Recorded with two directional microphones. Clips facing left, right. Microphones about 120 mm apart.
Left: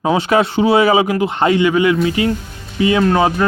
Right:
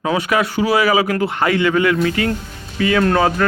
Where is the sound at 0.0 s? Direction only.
25° left (ahead or behind).